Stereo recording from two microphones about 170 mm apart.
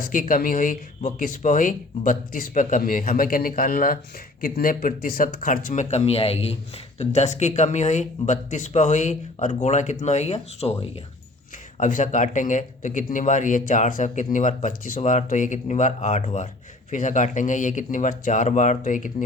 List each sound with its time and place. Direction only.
0.0 s speech: 55° left (ahead or behind); by 10.9 s 35° left (ahead or behind)
11.8 s speech: 50° left (ahead or behind)